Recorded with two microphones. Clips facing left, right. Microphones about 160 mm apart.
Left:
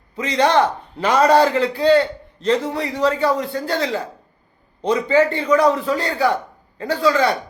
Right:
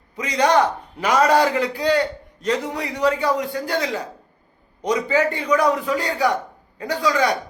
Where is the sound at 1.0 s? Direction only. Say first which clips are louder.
Left 2 dB; 30° left (ahead or behind).